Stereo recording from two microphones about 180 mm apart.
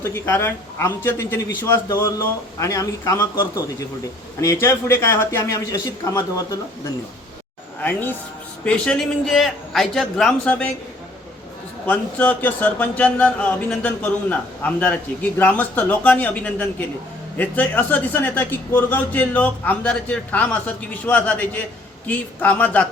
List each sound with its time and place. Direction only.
0.0 s speech: 15° left (ahead or behind)
7.8 s a man's voice: 10° left (ahead or behind)
11.9 s speech: 5° left (ahead or behind)